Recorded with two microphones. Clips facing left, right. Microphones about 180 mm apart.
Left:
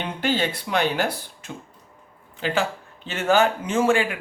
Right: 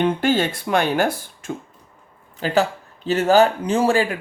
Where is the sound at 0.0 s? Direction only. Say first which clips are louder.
Right 6 dB; 50° right (ahead or behind).